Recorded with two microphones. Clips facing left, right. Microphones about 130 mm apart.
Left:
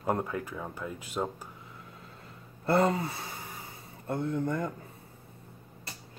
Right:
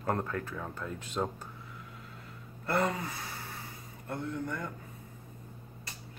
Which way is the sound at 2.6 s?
30° left (ahead or behind).